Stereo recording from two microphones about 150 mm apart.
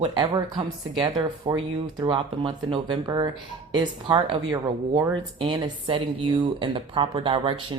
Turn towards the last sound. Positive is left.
turn(degrees=-35)  # may be behind; listen again after turning